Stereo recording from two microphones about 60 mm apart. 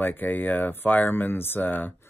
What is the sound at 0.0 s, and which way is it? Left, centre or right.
Speech, left.